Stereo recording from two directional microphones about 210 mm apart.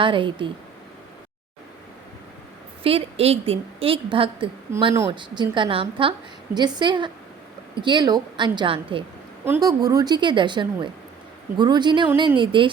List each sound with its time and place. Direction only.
0.0 s a woman's voice: 25° right (ahead or behind)
2.8 s a woman's voice: 30° right (ahead or behind)
9.4 s a woman's voice: 15° right (ahead or behind)